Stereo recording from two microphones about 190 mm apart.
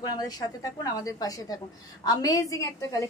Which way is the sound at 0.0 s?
20° left (ahead or behind).